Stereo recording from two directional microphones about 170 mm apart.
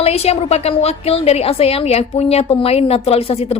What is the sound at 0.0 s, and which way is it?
A woman's voice, 35° left (ahead or behind).